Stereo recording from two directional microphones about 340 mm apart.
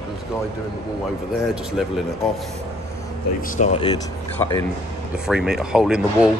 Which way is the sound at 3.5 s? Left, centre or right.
Centre.